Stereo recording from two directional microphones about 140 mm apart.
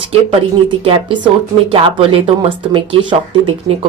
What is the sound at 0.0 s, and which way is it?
Speech, 45° right (ahead or behind).